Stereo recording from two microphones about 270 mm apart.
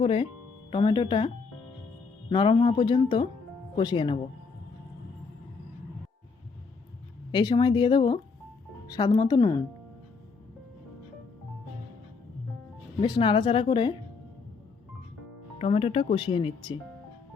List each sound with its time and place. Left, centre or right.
0.0 s speech: centre
2.3 s speech: centre
7.3 s speech: centre
13.0 s speech: centre
15.5 s speech: left